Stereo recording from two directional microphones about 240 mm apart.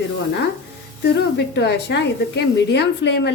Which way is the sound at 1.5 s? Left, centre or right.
Left.